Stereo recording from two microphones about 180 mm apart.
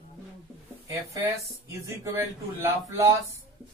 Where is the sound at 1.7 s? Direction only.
15° right (ahead or behind).